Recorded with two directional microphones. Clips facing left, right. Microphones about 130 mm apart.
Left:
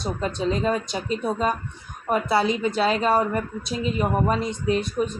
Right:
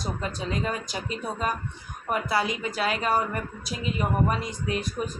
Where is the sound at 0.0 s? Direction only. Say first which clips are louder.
Left 6 dB; 25° left (ahead or behind).